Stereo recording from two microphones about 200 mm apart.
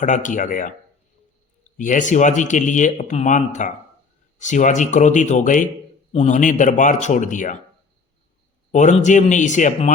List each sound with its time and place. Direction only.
0.0 s speech: 40° left (ahead or behind)
1.8 s speech: 40° left (ahead or behind)
8.7 s a man's voice: 35° left (ahead or behind)